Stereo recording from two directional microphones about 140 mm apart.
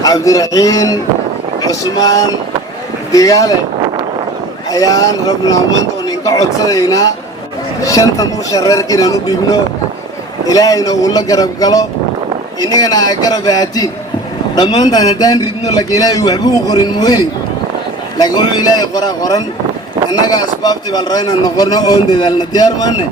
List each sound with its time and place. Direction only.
0.0 s speech: 25° left (ahead or behind)
4.7 s speech: 25° left (ahead or behind)
18.2 s speech: 30° left (ahead or behind)